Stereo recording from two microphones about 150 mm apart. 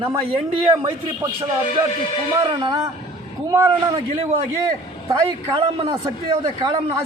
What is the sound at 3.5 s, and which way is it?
Speech, 15° right (ahead or behind).